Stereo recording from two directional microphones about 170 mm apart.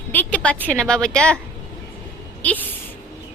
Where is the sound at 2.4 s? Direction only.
10° left (ahead or behind).